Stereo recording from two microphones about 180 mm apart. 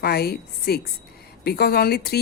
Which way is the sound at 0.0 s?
60° left (ahead or behind).